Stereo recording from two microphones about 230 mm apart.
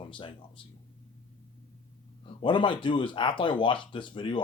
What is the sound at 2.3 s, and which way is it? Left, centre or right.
Speech, left.